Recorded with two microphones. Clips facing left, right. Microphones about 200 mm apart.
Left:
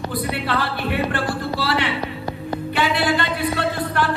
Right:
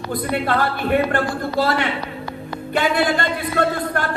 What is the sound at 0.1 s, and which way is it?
Speech, 50° right (ahead or behind).